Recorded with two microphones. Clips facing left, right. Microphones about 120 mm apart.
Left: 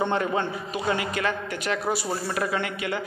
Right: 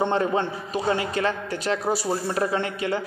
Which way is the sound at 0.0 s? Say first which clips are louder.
Right 2 dB; 30° right (ahead or behind).